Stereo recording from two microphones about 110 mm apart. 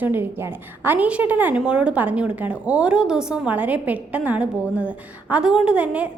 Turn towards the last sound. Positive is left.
turn(degrees=-10)  # may be behind; listen again after turning